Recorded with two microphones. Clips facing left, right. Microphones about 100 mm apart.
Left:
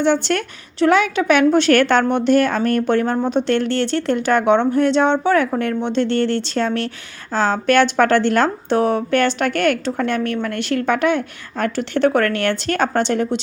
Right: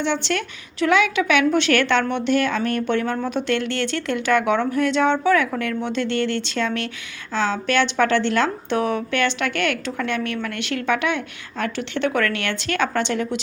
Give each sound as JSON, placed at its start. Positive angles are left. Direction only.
{"t": 0.0, "sound": "a woman's voice", "side_deg": 45}